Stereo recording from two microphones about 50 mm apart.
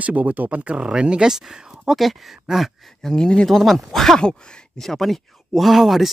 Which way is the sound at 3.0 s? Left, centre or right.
Centre.